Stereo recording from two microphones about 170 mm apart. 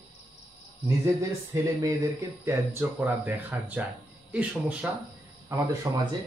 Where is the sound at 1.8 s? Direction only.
20° right (ahead or behind).